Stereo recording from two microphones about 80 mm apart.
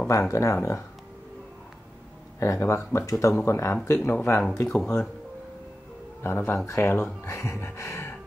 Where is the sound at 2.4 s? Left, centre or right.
Left.